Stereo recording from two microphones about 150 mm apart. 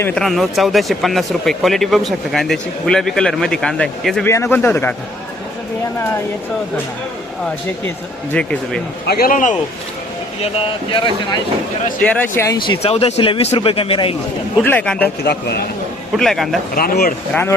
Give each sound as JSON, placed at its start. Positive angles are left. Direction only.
{"t": 0.0, "sound": "speech", "side_deg": 5}
{"t": 4.3, "sound": "speech", "side_deg": 15}
{"t": 8.3, "sound": "speech", "side_deg": 5}
{"t": 9.0, "sound": "speech", "side_deg": 85}
{"t": 10.9, "sound": "speech", "side_deg": 35}
{"t": 12.0, "sound": "speech", "side_deg": 10}
{"t": 12.5, "sound": "speech", "side_deg": 35}
{"t": 14.6, "sound": "speech", "side_deg": 10}
{"t": 15.2, "sound": "a man's voice", "side_deg": 90}
{"t": 16.1, "sound": "speech", "side_deg": 0}
{"t": 16.7, "sound": "speech", "side_deg": 80}